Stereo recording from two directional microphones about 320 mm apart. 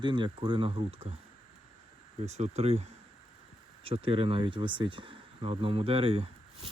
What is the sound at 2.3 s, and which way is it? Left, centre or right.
Speech, right.